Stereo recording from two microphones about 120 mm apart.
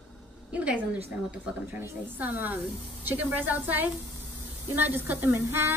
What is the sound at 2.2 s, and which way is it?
A woman's voice, 15° right (ahead or behind).